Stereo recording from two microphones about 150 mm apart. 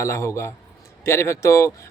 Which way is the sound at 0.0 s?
20° left (ahead or behind).